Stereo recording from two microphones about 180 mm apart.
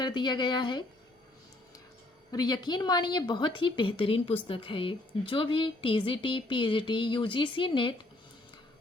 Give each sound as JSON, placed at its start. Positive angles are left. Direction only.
{"t": 0.0, "sound": "a woman's voice", "side_deg": 25}
{"t": 2.3, "sound": "a woman's voice", "side_deg": 20}